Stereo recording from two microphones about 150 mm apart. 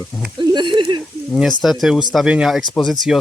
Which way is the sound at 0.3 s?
30° right (ahead or behind).